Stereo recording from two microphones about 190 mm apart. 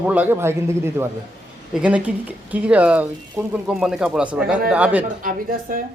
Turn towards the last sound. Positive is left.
turn(degrees=-45)  # may be behind; listen again after turning